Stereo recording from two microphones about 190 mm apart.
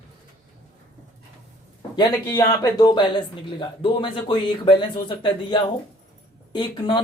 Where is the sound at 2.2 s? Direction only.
15° left (ahead or behind).